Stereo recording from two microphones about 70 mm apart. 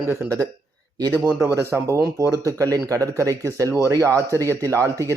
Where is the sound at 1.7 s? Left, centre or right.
Right.